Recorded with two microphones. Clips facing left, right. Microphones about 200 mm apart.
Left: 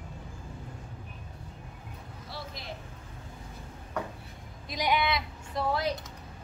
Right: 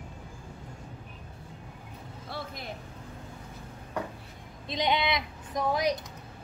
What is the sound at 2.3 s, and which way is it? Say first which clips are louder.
Vehicle: right 4 dB; 55° right (ahead or behind).